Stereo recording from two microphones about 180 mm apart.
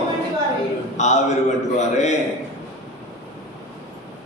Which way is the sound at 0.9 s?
40° left (ahead or behind).